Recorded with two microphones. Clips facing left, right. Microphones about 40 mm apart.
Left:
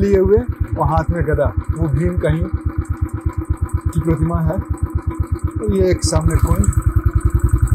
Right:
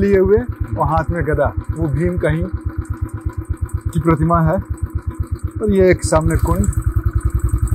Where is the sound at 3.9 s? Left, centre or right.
Right.